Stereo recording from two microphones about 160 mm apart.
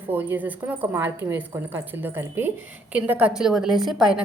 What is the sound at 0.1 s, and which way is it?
A woman's voice, 10° right (ahead or behind).